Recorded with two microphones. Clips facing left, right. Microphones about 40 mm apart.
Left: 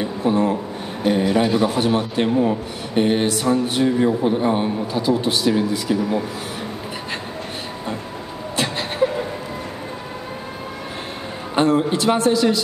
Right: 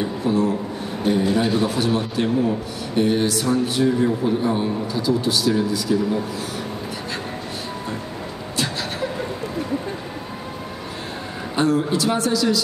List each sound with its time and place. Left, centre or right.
0.2 s a man's voice: left
11.5 s a man's voice: left